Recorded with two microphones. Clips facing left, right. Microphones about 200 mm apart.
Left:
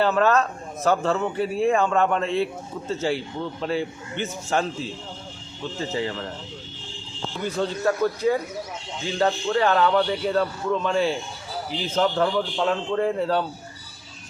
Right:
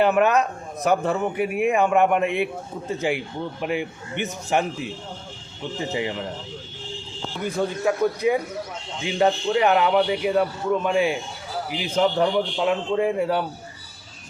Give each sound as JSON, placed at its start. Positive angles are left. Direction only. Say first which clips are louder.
{"t": 0.0, "sound": "speech", "louder": "right 1 dB", "side_deg": -15}
{"t": 7.4, "sound": "speech", "louder": "right 1 dB", "side_deg": -10}